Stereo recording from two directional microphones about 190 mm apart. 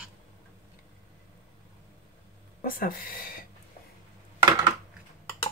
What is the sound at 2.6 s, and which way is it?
Speech, 50° left (ahead or behind).